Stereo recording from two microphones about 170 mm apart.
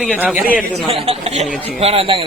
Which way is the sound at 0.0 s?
5° right (ahead or behind).